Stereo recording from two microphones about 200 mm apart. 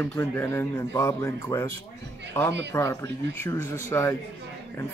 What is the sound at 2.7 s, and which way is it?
Speech, 15° left (ahead or behind).